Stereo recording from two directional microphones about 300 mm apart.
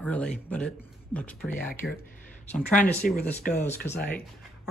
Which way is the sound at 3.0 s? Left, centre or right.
Centre.